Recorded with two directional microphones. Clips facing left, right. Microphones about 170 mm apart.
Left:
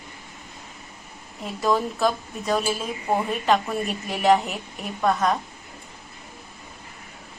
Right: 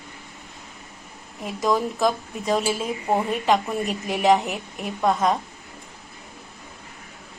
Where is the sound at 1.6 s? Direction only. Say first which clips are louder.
Right 1 dB; 15° right (ahead or behind).